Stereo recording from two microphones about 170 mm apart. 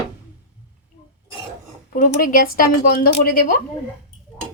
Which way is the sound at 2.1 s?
55° left (ahead or behind).